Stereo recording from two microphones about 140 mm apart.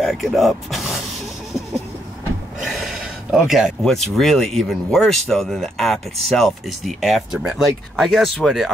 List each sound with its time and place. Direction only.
0.0 s speech: centre (ahead or behind)
2.6 s speech: centre (ahead or behind)